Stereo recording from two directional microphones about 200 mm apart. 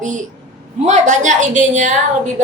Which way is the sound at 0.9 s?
35° right (ahead or behind).